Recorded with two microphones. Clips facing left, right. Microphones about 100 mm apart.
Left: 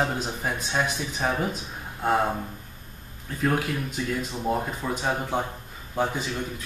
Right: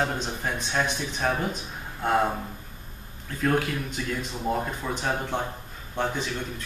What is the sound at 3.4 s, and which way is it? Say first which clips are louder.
A man's voice: even; 5° left (ahead or behind).